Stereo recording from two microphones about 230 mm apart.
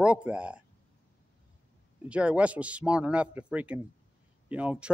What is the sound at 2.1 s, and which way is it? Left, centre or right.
Speech, centre.